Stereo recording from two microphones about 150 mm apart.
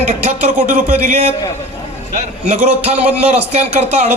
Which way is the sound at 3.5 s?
50° right (ahead or behind).